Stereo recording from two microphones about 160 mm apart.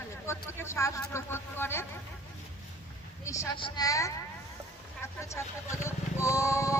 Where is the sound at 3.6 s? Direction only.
30° left (ahead or behind).